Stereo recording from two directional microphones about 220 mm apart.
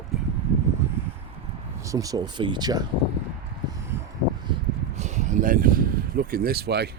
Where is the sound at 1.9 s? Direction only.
15° right (ahead or behind).